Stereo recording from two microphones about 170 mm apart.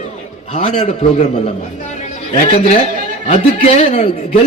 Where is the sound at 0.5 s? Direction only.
35° left (ahead or behind).